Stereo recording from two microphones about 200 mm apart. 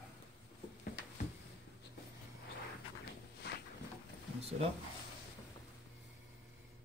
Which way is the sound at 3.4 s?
55° left (ahead or behind).